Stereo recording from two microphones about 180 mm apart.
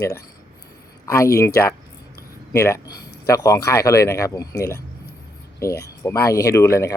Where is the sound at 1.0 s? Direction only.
15° left (ahead or behind).